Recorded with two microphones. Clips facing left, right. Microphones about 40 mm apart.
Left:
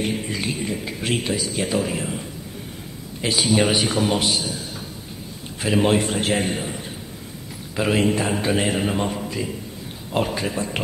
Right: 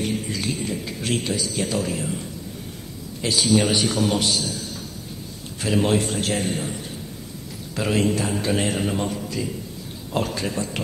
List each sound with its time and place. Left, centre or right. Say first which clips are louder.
0.0 s a man's voice: left 1 dB; left